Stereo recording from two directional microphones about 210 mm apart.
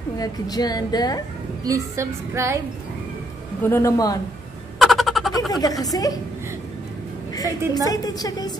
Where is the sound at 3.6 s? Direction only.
15° left (ahead or behind).